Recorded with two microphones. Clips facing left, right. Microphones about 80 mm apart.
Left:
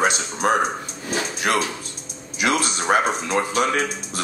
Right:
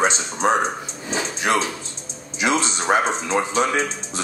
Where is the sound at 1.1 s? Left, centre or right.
Right.